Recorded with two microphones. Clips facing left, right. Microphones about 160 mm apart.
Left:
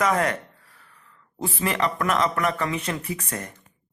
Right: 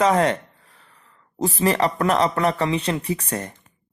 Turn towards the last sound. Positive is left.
turn(degrees=-30)  # may be behind; listen again after turning